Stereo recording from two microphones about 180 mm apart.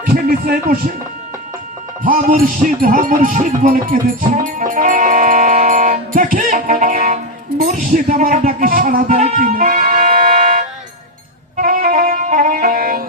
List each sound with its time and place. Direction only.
0.0 s music: 55° right (ahead or behind)
2.0 s music: 50° right (ahead or behind)
11.5 s saxophone: 50° right (ahead or behind)